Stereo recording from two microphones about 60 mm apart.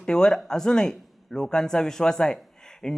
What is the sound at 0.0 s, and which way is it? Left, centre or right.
Speech, centre.